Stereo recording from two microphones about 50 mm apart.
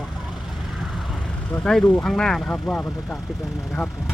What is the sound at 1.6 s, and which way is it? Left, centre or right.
Speech, centre.